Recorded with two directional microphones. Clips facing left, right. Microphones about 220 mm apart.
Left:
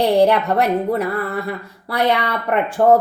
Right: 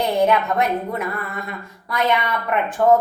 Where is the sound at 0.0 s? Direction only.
35° left (ahead or behind).